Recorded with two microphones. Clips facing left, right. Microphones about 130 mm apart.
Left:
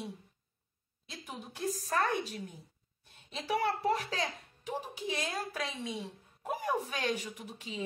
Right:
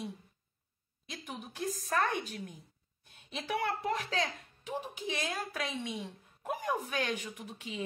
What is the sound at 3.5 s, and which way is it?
A woman's voice, 35° left (ahead or behind).